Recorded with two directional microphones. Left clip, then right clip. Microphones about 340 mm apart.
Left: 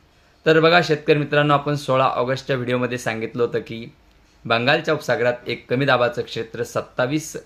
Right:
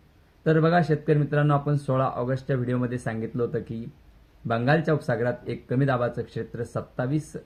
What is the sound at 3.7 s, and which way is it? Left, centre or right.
Speech, left.